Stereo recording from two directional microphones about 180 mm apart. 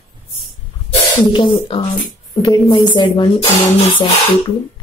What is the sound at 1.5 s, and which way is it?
Speech, 30° left (ahead or behind).